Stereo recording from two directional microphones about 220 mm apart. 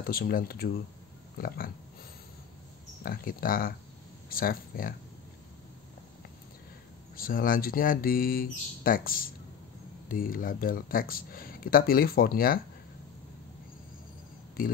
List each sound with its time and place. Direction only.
0.0 s speech: 45° left (ahead or behind)
3.0 s speech: 40° left (ahead or behind)
7.2 s speech: 40° left (ahead or behind)